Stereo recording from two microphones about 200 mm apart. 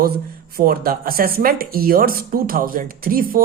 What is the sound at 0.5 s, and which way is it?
Speech, 50° right (ahead or behind).